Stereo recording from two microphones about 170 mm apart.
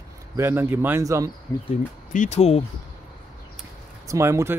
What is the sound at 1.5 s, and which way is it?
Speech, 10° left (ahead or behind).